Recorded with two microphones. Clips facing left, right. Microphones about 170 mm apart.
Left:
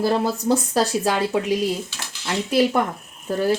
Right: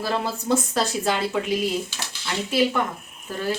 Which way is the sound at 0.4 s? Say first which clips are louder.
Even; 35° left (ahead or behind).